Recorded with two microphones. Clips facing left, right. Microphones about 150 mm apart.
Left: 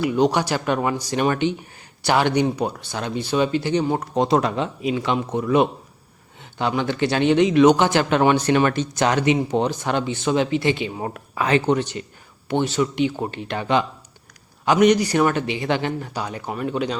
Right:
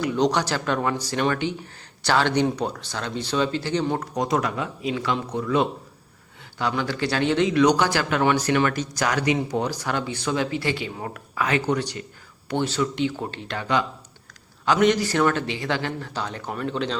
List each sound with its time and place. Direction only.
0.0 s speech: 10° left (ahead or behind)
4.1 s speech: 25° left (ahead or behind); by 17.0 s 10° left (ahead or behind)